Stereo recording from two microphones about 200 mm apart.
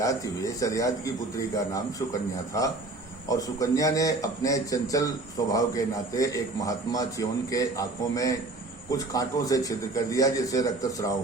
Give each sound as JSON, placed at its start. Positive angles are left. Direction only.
{"t": 0.0, "sound": "a man's voice", "side_deg": 15}
{"t": 3.2, "sound": "a man's voice", "side_deg": 15}